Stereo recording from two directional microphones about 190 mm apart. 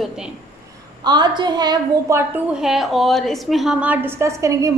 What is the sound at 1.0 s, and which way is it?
A woman's voice, 20° right (ahead or behind).